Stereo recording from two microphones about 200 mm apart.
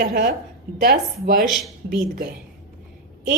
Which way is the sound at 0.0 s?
45° right (ahead or behind).